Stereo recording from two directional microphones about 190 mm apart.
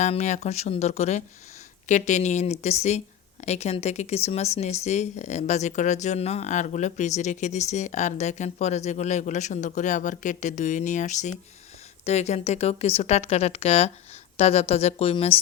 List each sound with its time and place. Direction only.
0.0 s speech: 40° left (ahead or behind)